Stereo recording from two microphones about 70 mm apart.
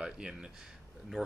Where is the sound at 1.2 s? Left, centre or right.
Centre.